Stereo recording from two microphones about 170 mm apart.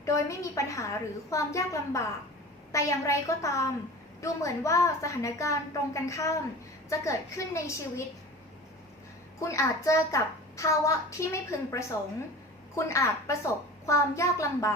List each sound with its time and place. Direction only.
0.0 s a child's voice: 20° left (ahead or behind)
9.4 s a child's voice: 20° left (ahead or behind)